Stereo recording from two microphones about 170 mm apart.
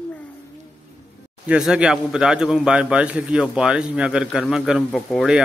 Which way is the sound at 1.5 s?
5° right (ahead or behind).